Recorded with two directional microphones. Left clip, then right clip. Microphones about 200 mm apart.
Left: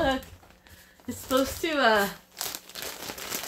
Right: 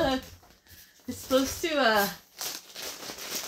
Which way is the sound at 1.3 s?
Centre (ahead or behind).